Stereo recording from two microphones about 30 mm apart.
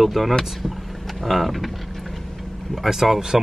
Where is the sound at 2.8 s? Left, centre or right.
Centre.